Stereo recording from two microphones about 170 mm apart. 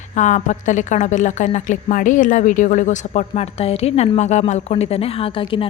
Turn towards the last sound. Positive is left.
turn(degrees=30)  # may be behind; listen again after turning